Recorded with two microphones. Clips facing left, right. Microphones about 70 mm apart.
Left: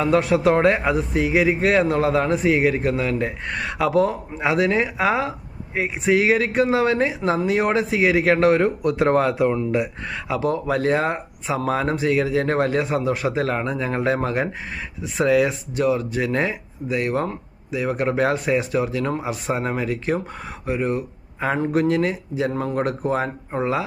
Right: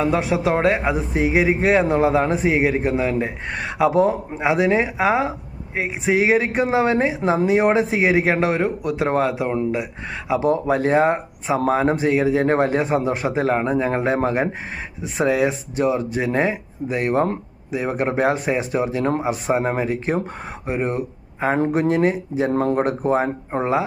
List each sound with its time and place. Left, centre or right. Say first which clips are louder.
0.0 s a man's voice: left 2 dB; centre
0.9 s a man's voice: even; right
10.3 s speech: right 3 dB; right